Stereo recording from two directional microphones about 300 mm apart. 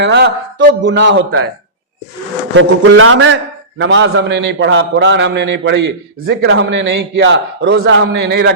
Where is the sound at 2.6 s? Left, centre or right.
Right.